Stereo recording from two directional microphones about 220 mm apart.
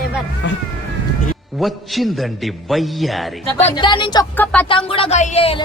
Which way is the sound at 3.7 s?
20° left (ahead or behind).